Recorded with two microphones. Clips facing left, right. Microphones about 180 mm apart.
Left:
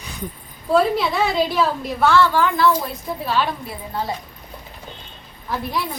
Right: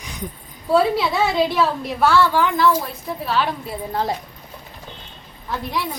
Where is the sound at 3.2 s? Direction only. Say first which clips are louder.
Even; centre (ahead or behind).